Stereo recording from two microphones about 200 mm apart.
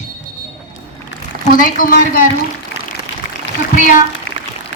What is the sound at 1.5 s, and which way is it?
Speech, 45° left (ahead or behind).